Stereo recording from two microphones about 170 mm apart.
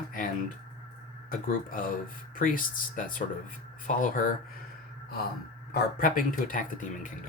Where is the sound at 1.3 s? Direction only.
55° left (ahead or behind).